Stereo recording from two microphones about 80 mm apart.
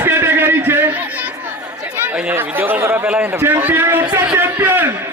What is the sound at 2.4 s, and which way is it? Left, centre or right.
Speech, right.